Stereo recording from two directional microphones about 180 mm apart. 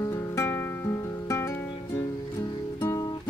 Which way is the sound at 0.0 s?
15° left (ahead or behind).